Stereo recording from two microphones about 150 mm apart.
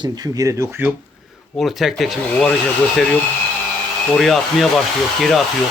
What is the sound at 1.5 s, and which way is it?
Speech, centre (ahead or behind).